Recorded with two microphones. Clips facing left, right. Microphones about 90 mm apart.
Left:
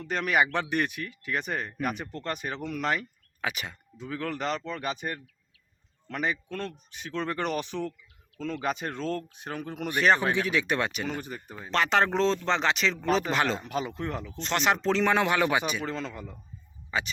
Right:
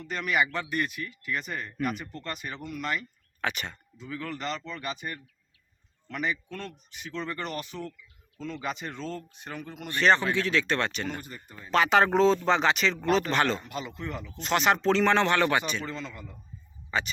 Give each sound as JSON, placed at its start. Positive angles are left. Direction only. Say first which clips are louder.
{"t": 0.1, "sound": "speech", "louder": "left 2 dB", "side_deg": 65}
{"t": 1.3, "sound": "speech", "louder": "left 3 dB", "side_deg": 60}
{"t": 3.4, "sound": "speech", "louder": "right 1 dB", "side_deg": 5}
{"t": 4.0, "sound": "speech", "louder": "left 3 dB", "side_deg": 65}
{"t": 8.4, "sound": "speech", "louder": "left 4 dB", "side_deg": 55}
{"t": 9.9, "sound": "speech", "louder": "even", "side_deg": 10}
{"t": 16.0, "sound": "a man's voice", "louder": "left 3 dB", "side_deg": 40}
{"t": 16.9, "sound": "speech", "louder": "right 1 dB", "side_deg": 5}